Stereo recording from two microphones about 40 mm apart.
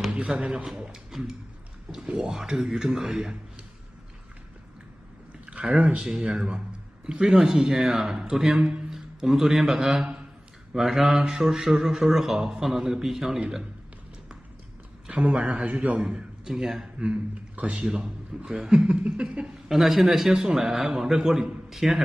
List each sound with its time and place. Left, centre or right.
0.3 s chuckle: right
1.1 s a man's voice: centre
5.6 s a sound: right
5.9 s chuckle: centre
7.1 s a man's voice: centre
15.0 s a man's voice: right
15.3 s a man's voice: right
16.4 s a man's voice: centre
17.0 s speech: right
17.7 s a man's voice: centre
18.9 s chuckle: right
19.7 s a man's voice: centre